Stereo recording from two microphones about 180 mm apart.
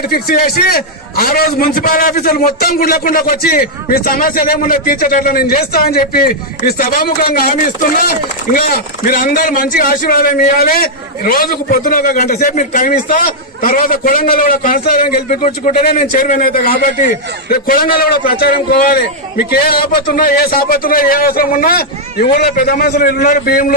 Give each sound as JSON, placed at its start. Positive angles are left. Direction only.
{"t": 0.0, "sound": "a man's voice", "side_deg": 55}
{"t": 15.3, "sound": "a man's voice", "side_deg": 40}